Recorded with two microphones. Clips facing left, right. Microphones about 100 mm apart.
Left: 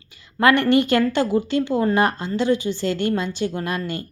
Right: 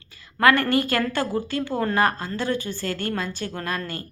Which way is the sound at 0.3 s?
20° left (ahead or behind).